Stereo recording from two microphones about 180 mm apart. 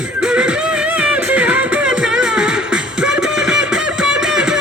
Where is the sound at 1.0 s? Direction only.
5° right (ahead or behind).